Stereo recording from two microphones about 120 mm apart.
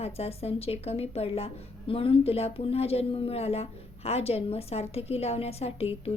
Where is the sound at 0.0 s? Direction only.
55° left (ahead or behind).